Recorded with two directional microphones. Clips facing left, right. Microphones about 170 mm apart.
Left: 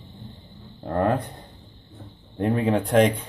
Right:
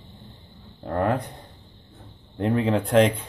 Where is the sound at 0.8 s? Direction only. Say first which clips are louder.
Left 1 dB; 30° left (ahead or behind).